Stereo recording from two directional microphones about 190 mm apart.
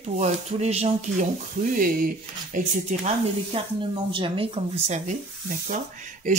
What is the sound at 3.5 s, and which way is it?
Speech, 30° right (ahead or behind).